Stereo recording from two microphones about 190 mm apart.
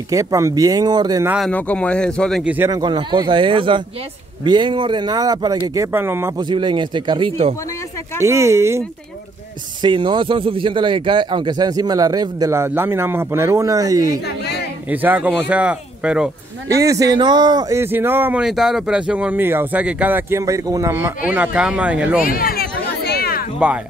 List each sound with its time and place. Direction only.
0.1 s speech: 15° right (ahead or behind)
1.5 s speech: 5° left (ahead or behind)
2.4 s speech: 10° right (ahead or behind)
2.7 s speech: 25° right (ahead or behind)
6.5 s speech: 25° right (ahead or behind)
8.2 s speech: 15° right (ahead or behind)
9.8 s speech: 25° right (ahead or behind); by 16.3 s 5° right (ahead or behind)
16.7 s speech: 15° right (ahead or behind)
22.2 s a sound: 50° left (ahead or behind)